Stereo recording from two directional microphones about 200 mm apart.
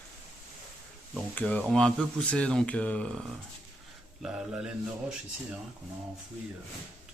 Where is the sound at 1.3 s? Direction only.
5° left (ahead or behind).